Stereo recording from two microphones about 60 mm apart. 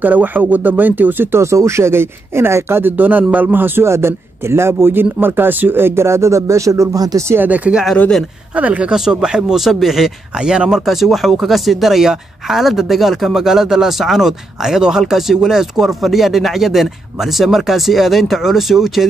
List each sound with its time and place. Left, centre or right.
0.0 s speech: right
1.4 s speech: right
3.8 s speech: right
7.3 s speech: right
8.9 s speech: centre